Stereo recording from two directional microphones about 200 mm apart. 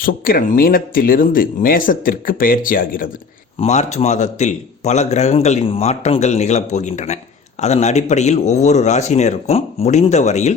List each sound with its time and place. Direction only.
0.0 s speech: 45° left (ahead or behind)
3.6 s a man's voice: 35° left (ahead or behind)